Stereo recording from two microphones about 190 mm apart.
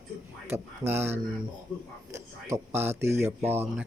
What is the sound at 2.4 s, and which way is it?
Speech, 15° right (ahead or behind).